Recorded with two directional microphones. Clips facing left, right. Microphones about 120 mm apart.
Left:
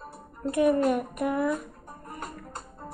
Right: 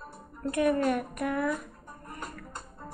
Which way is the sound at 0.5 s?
15° left (ahead or behind).